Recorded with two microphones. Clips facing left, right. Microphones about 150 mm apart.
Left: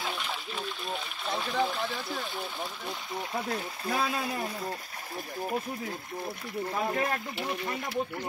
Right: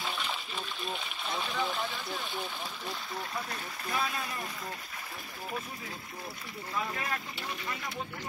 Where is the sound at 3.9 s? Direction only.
60° left (ahead or behind).